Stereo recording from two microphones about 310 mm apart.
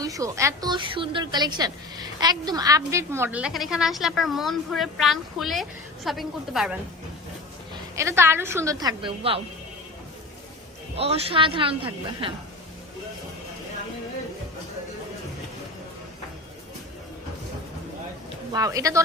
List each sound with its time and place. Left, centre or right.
0.0 s a woman's voice: centre
7.9 s a woman's voice: centre
10.9 s a woman's voice: centre
18.5 s a woman's voice: centre